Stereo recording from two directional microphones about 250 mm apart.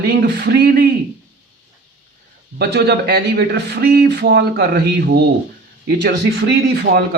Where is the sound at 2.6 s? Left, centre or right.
Right.